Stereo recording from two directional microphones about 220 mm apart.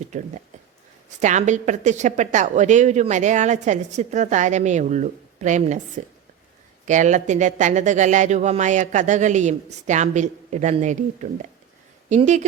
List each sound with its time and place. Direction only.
1.2 s a woman's voice: 35° right (ahead or behind)
6.8 s a woman's voice: 35° right (ahead or behind)